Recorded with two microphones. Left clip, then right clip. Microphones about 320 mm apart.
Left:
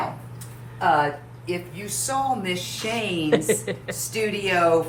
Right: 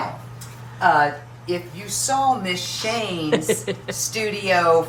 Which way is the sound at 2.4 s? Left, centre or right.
Centre.